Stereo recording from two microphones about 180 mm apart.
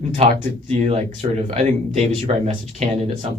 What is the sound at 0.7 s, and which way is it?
Speech, 35° right (ahead or behind).